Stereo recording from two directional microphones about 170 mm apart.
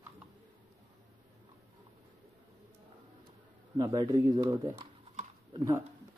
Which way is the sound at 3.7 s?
25° right (ahead or behind).